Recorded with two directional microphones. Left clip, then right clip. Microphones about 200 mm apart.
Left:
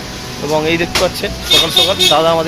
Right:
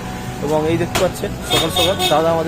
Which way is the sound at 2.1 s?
5° left (ahead or behind).